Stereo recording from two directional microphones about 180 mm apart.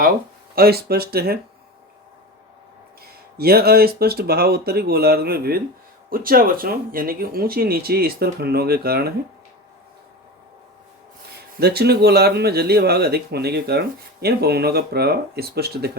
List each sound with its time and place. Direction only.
0.5 s speech: 60° right (ahead or behind)
3.3 s speech: 60° right (ahead or behind)
11.6 s speech: 60° right (ahead or behind)